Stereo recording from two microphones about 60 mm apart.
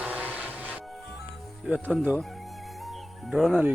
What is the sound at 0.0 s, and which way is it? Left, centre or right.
Music, right.